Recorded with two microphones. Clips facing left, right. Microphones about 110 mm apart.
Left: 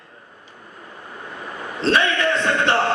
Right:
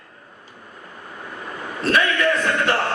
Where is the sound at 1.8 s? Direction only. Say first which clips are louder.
Even; 25° left (ahead or behind).